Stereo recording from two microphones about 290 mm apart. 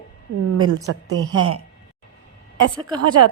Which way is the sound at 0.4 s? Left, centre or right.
Right.